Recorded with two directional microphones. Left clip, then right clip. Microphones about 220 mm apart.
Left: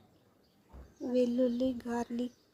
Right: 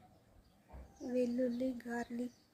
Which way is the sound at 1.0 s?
15° left (ahead or behind).